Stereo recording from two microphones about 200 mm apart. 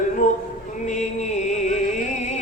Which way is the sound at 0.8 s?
35° left (ahead or behind).